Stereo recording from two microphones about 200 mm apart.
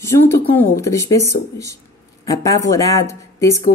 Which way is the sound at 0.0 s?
15° left (ahead or behind).